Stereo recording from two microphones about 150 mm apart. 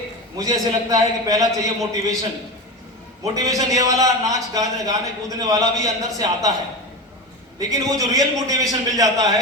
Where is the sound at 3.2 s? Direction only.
25° right (ahead or behind).